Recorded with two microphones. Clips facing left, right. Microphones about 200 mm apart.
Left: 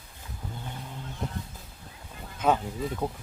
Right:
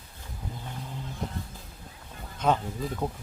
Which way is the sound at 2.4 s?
5° left (ahead or behind).